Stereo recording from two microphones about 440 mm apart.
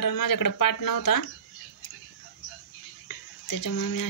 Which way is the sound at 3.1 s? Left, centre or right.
Left.